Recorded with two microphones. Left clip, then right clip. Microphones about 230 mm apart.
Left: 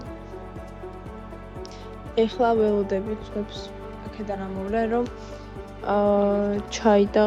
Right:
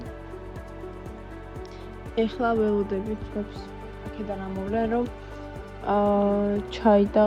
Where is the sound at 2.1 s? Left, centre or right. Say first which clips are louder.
Left 4 dB; centre.